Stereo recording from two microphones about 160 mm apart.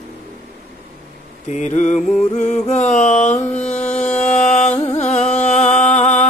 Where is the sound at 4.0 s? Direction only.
45° left (ahead or behind).